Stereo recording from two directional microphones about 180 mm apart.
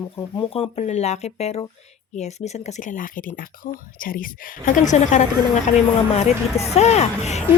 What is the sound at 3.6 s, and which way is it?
A woman's voice, 60° left (ahead or behind).